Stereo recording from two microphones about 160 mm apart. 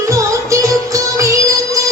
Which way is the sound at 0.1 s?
20° right (ahead or behind).